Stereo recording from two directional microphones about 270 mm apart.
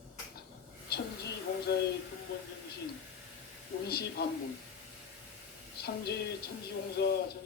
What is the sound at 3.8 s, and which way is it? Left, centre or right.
Speech, left.